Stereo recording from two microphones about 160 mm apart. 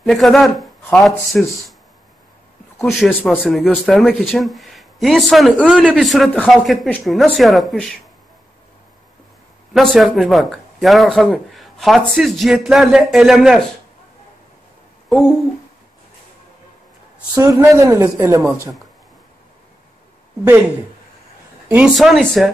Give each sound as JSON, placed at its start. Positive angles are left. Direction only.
{"t": 0.0, "sound": "speech", "side_deg": 0}
{"t": 2.8, "sound": "speech", "side_deg": 0}
{"t": 3.1, "sound": "a man's voice", "side_deg": 10}
{"t": 3.4, "sound": "speech", "side_deg": 0}
{"t": 9.8, "sound": "speech", "side_deg": 0}
{"t": 15.0, "sound": "speech", "side_deg": 0}
{"t": 17.4, "sound": "a man's voice", "side_deg": -20}
{"t": 21.6, "sound": "speech", "side_deg": -10}
{"t": 21.9, "sound": "speech", "side_deg": 0}